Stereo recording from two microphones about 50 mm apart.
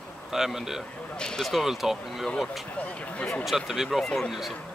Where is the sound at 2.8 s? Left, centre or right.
Left.